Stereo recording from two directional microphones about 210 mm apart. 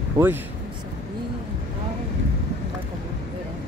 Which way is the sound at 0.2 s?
15° right (ahead or behind).